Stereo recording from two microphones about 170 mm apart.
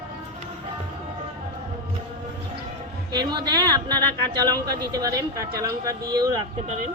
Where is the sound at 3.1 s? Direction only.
25° right (ahead or behind).